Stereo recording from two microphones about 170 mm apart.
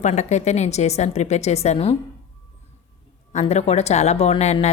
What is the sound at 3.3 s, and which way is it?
Speech, 40° left (ahead or behind).